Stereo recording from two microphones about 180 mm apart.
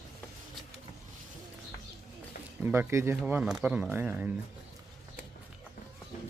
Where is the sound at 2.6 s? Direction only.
15° right (ahead or behind).